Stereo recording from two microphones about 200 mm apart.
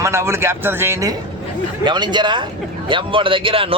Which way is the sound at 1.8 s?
20° right (ahead or behind).